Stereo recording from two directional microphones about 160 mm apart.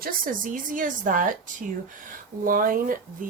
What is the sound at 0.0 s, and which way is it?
A woman's voice, 60° right (ahead or behind).